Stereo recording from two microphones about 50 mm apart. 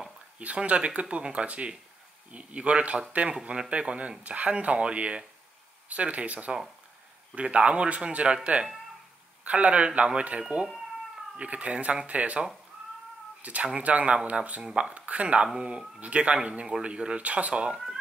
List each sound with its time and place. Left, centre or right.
0.4 s speech: right
9.4 s speech: right
15.0 s speech: right